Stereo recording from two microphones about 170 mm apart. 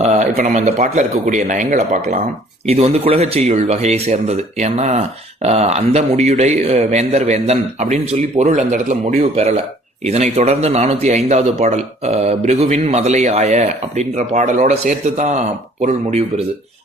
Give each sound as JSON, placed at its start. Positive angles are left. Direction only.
{"t": 0.0, "sound": "a sound", "side_deg": -40}
{"t": 0.3, "sound": "speech", "side_deg": -45}
{"t": 2.6, "sound": "speech", "side_deg": -35}